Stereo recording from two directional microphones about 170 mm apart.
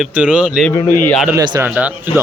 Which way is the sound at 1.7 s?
10° right (ahead or behind).